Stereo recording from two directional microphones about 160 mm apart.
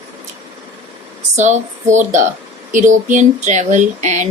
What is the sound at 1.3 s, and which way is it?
Speech, 45° right (ahead or behind).